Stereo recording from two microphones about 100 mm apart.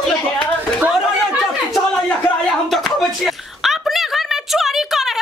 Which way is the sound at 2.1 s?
15° left (ahead or behind).